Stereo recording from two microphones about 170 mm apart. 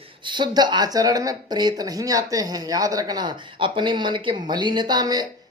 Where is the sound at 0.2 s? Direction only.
25° right (ahead or behind).